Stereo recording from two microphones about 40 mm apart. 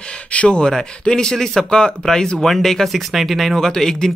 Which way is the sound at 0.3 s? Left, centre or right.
Left.